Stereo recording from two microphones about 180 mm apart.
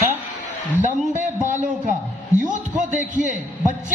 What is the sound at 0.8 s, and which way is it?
A man's voice, 45° right (ahead or behind).